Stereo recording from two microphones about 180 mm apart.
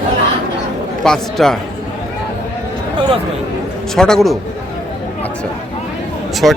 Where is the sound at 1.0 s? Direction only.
5° left (ahead or behind).